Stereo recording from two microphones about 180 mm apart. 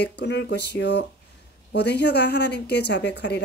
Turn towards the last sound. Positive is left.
turn(degrees=70)  # may be behind; listen again after turning